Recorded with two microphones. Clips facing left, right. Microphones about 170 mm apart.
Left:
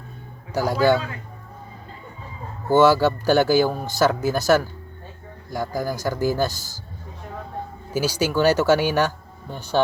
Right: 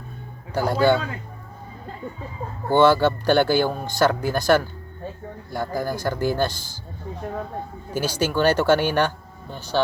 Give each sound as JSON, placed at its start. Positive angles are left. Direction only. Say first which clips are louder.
{"t": 0.5, "sound": "speech", "louder": "even", "side_deg": 10}
{"t": 2.6, "sound": "speech", "louder": "left 1 dB", "side_deg": 5}
{"t": 7.9, "sound": "speech", "louder": "left 1 dB", "side_deg": 10}